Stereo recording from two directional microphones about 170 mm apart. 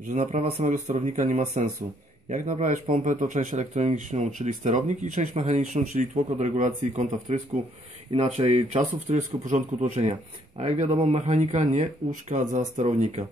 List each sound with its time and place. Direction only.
0.1 s speech: 45° right (ahead or behind)
8.1 s speech: 35° right (ahead or behind)